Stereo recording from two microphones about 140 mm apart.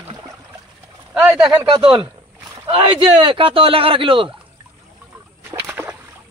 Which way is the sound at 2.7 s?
40° right (ahead or behind).